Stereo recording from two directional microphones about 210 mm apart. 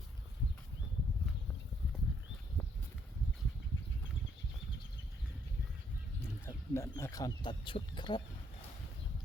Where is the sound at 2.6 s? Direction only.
5° left (ahead or behind).